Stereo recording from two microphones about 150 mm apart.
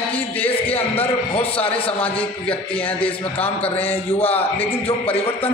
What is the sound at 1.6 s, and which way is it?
Speech, 40° left (ahead or behind).